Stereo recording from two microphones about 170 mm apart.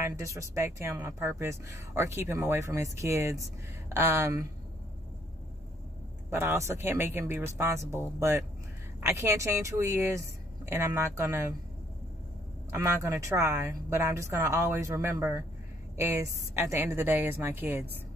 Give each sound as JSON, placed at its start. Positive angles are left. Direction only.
{"t": 0.0, "sound": "speech", "side_deg": -15}
{"t": 6.3, "sound": "speech", "side_deg": -15}
{"t": 12.7, "sound": "speech", "side_deg": -15}